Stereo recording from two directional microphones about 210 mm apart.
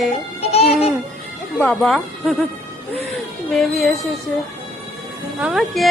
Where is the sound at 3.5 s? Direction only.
Centre (ahead or behind).